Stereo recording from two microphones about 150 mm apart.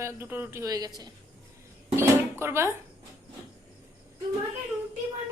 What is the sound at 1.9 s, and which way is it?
Dishes, 15° right (ahead or behind).